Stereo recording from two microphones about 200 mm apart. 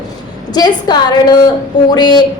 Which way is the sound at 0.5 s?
20° left (ahead or behind).